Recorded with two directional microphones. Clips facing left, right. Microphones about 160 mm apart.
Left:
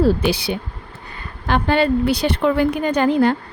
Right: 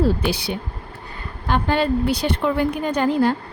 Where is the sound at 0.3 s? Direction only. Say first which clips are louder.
Left 3 dB; 90° left.